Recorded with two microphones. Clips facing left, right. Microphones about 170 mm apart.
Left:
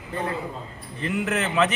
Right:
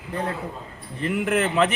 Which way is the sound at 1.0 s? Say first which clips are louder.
Right 3 dB; 50° right (ahead or behind).